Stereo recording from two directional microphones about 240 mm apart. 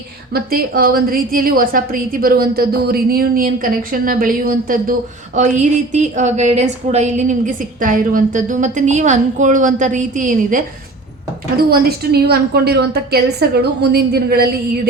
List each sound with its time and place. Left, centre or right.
0.3 s a woman's voice: right